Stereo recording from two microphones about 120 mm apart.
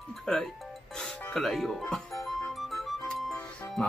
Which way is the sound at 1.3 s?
Centre (ahead or behind).